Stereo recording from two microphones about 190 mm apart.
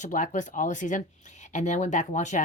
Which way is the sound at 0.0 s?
40° left (ahead or behind).